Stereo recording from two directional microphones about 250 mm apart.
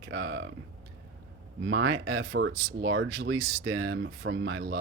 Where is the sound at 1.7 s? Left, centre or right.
Right.